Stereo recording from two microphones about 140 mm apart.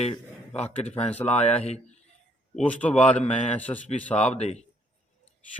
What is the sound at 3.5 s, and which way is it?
Speech, 10° left (ahead or behind).